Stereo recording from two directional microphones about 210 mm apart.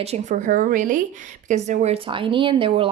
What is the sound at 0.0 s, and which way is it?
A woman's voice, 30° right (ahead or behind).